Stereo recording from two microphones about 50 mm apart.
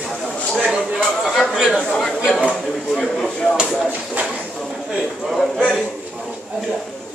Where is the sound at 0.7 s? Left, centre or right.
Right.